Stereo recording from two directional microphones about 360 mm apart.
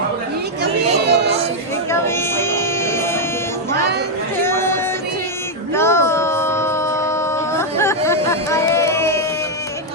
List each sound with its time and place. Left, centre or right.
0.6 s chatter: right
1.9 s music: centre
4.4 s a sound: centre
5.7 s music: centre